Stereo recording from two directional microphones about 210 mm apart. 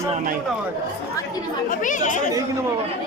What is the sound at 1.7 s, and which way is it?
Speech, 40° left (ahead or behind).